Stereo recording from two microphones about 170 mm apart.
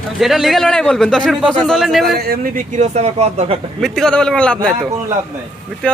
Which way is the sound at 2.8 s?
40° right (ahead or behind).